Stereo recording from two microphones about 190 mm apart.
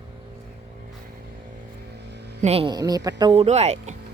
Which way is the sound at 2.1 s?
60° right (ahead or behind).